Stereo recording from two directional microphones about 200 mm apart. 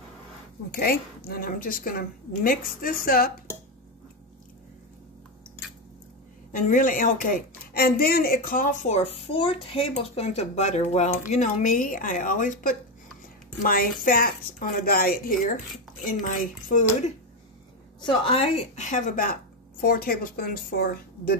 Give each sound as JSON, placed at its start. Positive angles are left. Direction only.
{"t": 0.7, "sound": "a woman's voice", "side_deg": 50}
{"t": 6.5, "sound": "a woman's voice", "side_deg": 40}
{"t": 18.0, "sound": "a woman's voice", "side_deg": 25}